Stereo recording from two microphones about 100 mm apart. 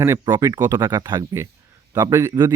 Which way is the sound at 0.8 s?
40° right (ahead or behind).